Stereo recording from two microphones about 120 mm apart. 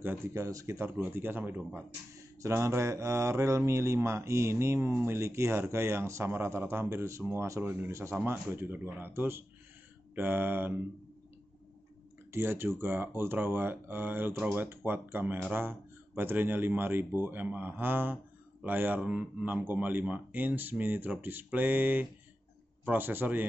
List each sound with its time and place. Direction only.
0.0 s speech: 20° right (ahead or behind)
12.3 s speech: 20° right (ahead or behind)